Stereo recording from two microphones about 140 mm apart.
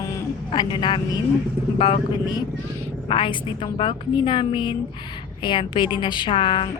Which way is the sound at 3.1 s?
40° left (ahead or behind).